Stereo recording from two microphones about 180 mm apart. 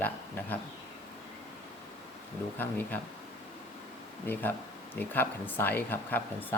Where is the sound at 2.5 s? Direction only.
10° left (ahead or behind).